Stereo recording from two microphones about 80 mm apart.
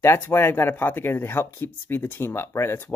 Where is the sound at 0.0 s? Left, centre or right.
Left.